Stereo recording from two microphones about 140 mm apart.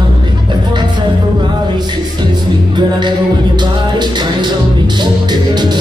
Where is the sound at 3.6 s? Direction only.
30° right (ahead or behind).